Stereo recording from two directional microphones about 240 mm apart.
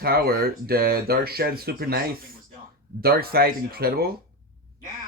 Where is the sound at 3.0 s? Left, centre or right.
Right.